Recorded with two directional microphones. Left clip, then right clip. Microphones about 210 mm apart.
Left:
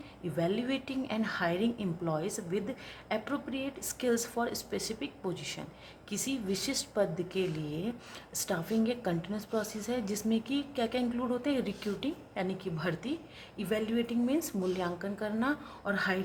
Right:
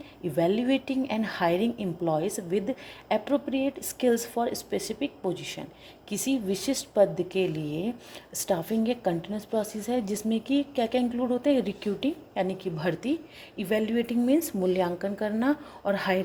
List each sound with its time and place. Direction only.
0.3 s a woman's voice: 20° right (ahead or behind)